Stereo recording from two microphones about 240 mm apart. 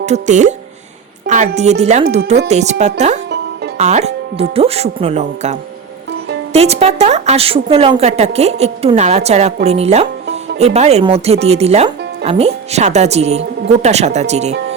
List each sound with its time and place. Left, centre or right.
0.0 s a woman's voice: right